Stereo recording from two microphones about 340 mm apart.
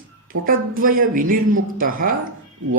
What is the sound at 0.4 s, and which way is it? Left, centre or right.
A woman's voice, right.